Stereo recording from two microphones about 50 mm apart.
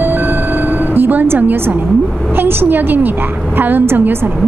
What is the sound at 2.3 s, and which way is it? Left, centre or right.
A woman's voice, right.